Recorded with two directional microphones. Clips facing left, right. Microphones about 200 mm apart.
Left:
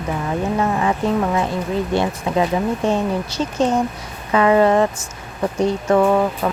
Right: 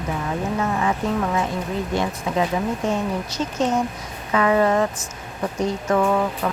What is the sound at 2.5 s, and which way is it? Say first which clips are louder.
Speech: left 4 dB; 30° left (ahead or behind).